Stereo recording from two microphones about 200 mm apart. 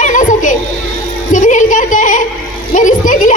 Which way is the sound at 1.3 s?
40° left (ahead or behind).